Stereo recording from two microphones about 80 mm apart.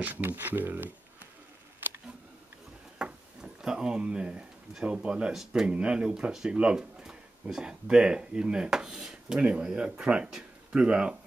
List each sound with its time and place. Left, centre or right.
0.0 s speech: right
3.0 s speech: centre